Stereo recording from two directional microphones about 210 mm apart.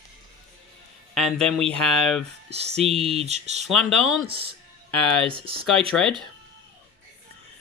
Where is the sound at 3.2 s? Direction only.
30° right (ahead or behind).